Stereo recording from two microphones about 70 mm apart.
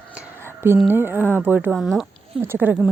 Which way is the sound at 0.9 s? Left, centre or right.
Right.